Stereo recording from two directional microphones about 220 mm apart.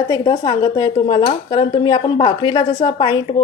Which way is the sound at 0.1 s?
20° left (ahead or behind).